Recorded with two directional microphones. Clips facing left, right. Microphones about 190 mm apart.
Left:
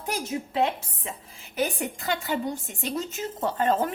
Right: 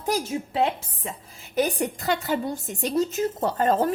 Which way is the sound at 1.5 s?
40° right (ahead or behind).